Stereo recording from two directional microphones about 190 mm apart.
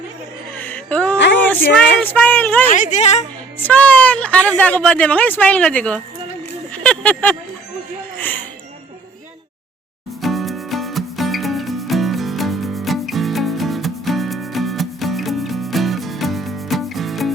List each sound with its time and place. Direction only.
0.5 s a sound: 10° left (ahead or behind)
1.5 s speech: 5° left (ahead or behind)
2.6 s a woman's voice: 40° left (ahead or behind)
3.6 s speech: 10° left (ahead or behind)
6.7 s a sound: 5° left (ahead or behind)
8.1 s music: 10° left (ahead or behind)
10.2 s music: centre (ahead or behind)